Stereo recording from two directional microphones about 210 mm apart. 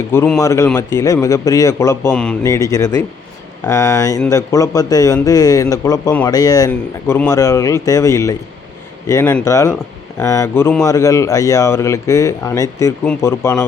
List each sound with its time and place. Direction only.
0.1 s a man's voice: 10° left (ahead or behind)